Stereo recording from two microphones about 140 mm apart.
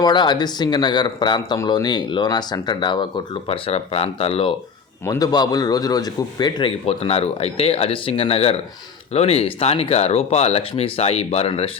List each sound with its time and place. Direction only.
0.0 s a man's voice: 30° left (ahead or behind)
3.5 s speech: 45° left (ahead or behind)
5.0 s a man's voice: 25° left (ahead or behind); by 11.7 s 45° left (ahead or behind)